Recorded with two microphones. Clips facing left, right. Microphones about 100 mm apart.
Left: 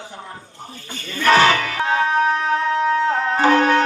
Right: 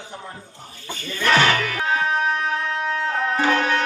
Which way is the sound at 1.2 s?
35° left (ahead or behind).